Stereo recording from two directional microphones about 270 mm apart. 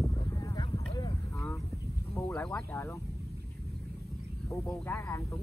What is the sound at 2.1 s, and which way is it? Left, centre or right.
Speech, centre.